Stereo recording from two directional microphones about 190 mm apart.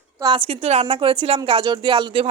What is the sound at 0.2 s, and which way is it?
A man's voice, 25° right (ahead or behind).